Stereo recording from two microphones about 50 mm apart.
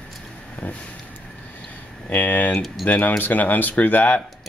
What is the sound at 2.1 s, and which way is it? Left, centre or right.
Speech, left.